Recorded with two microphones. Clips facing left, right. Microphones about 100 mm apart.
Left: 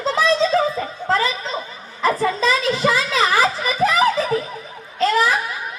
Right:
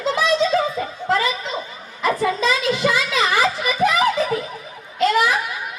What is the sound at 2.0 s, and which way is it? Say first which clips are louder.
Children playing: left 1 dB; 35° left (ahead or behind).